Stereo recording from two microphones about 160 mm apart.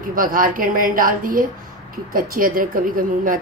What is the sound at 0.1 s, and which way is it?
A woman's voice, 60° right (ahead or behind).